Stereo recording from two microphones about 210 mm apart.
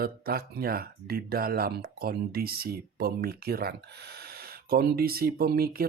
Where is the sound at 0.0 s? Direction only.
45° right (ahead or behind).